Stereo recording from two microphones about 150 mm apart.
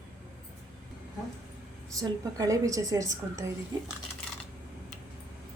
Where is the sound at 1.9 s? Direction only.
25° right (ahead or behind).